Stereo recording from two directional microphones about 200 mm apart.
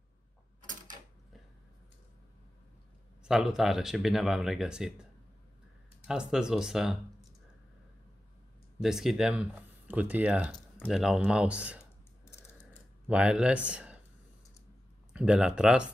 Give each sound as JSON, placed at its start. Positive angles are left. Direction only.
{"t": 0.6, "sound": "mechanisms", "side_deg": -40}
{"t": 3.3, "sound": "speech", "side_deg": 0}
{"t": 6.0, "sound": "speech", "side_deg": -5}
{"t": 8.8, "sound": "speech", "side_deg": 0}
{"t": 11.8, "sound": "clicking", "side_deg": 10}
{"t": 13.1, "sound": "speech", "side_deg": -5}
{"t": 15.1, "sound": "speech", "side_deg": -5}